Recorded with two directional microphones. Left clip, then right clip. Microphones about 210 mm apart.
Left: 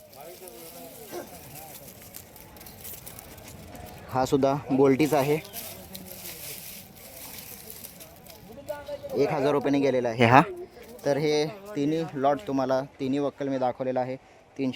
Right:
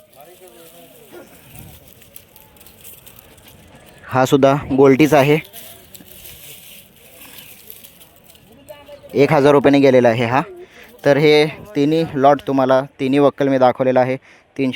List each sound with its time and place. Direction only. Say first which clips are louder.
4.1 s speech: right 11 dB; 20° right (ahead or behind)
9.1 s speech: right 13 dB; 25° right (ahead or behind)
10.2 s a man's voice: even; centre (ahead or behind)
11.0 s speech: right 13 dB; 25° right (ahead or behind)